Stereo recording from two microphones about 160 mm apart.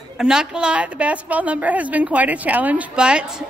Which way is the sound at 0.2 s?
5° right (ahead or behind).